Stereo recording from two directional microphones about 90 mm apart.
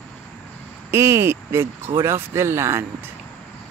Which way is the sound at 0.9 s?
30° right (ahead or behind).